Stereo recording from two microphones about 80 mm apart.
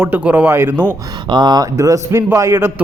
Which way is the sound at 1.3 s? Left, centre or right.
Right.